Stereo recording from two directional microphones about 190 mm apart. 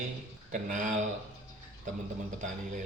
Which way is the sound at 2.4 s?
40° right (ahead or behind).